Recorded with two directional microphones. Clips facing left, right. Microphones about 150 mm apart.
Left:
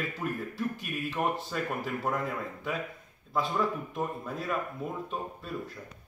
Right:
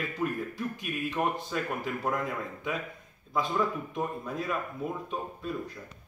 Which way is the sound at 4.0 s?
5° left (ahead or behind).